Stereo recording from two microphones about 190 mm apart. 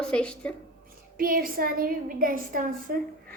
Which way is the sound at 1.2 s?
50° right (ahead or behind).